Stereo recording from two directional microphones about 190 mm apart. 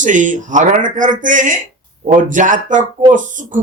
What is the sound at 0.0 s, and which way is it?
A man's voice, 40° right (ahead or behind).